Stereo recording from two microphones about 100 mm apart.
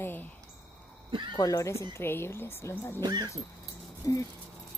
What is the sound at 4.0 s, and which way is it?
Speech, 35° left (ahead or behind).